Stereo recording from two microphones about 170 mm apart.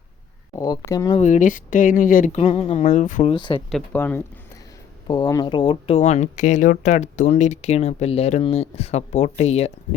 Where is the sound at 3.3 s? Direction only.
30° left (ahead or behind).